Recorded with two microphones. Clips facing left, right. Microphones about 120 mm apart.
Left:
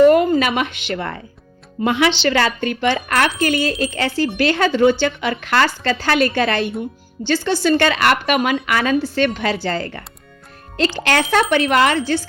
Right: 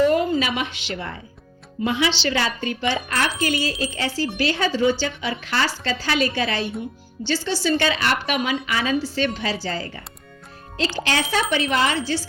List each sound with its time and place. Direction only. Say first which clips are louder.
0.0 s a woman's voice: left 7 dB; 60° left (ahead or behind)
11.0 s a woman's voice: left 6 dB; 60° left (ahead or behind)